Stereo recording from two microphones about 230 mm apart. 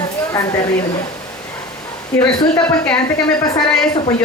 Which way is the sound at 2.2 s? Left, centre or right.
Centre.